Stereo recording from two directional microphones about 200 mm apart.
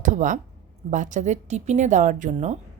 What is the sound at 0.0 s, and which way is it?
A woman's voice, 40° right (ahead or behind).